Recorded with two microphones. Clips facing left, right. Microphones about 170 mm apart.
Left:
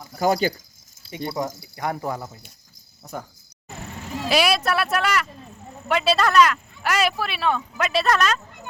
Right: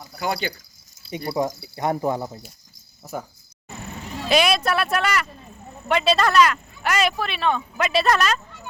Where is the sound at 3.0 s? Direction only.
5° right (ahead or behind).